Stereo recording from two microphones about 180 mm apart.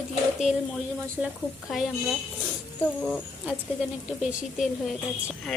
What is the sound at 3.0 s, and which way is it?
Speech, 10° left (ahead or behind).